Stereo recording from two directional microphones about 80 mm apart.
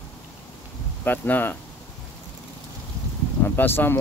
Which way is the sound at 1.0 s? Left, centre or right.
Left.